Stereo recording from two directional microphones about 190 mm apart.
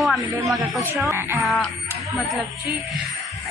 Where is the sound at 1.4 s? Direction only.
Centre (ahead or behind).